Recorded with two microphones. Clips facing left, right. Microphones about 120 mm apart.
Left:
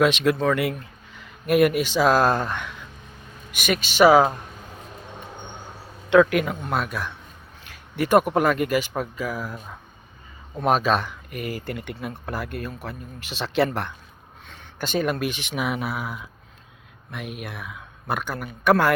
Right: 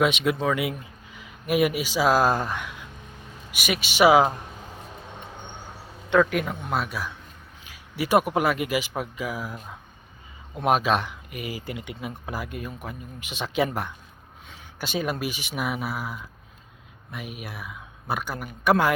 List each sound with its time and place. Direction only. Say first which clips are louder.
0.0 s speech: left 3 dB; 10° right (ahead or behind)
6.1 s speech: left 4 dB; centre (ahead or behind)
11.3 s speech: left 3 dB; 50° left (ahead or behind)
11.9 s speech: left 2 dB; 10° right (ahead or behind)
14.4 s a sound: left 3 dB; 10° right (ahead or behind)
15.0 s speech: left 3 dB; 5° right (ahead or behind)
17.4 s speech: left 2 dB; 5° right (ahead or behind)